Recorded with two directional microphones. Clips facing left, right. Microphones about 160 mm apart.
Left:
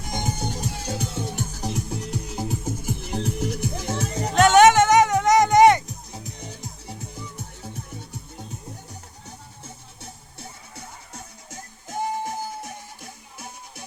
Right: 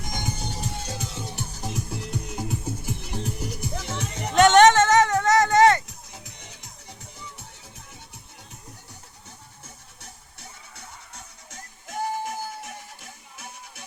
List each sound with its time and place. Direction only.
0.5 s music: 50° left (ahead or behind)
1.6 s music: 35° left (ahead or behind)
3.1 s music: 55° left (ahead or behind); by 4.4 s 35° left (ahead or behind)
4.4 s music: 5° left (ahead or behind)
11.5 s music: 25° left (ahead or behind)